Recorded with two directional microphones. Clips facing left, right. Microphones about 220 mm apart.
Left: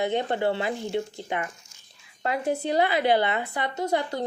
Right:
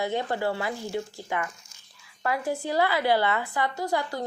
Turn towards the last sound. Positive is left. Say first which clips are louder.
# left 2 dB
turn(degrees=20)  # may be behind; listen again after turning